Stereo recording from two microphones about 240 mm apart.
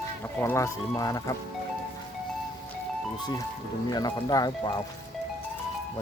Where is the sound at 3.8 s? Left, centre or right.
Centre.